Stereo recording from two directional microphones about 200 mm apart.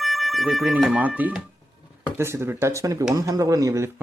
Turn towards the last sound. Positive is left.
turn(degrees=-15)  # may be behind; listen again after turning